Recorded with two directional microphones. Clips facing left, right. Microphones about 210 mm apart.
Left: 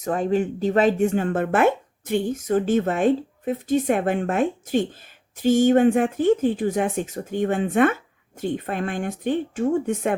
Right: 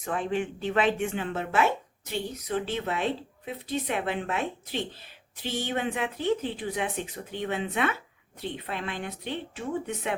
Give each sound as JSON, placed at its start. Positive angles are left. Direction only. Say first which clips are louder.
{"t": 0.0, "sound": "speech", "louder": "left 7 dB", "side_deg": 40}